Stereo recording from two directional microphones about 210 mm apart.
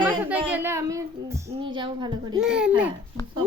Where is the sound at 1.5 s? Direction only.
25° right (ahead or behind).